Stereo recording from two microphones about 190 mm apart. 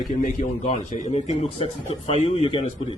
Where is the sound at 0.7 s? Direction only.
35° left (ahead or behind).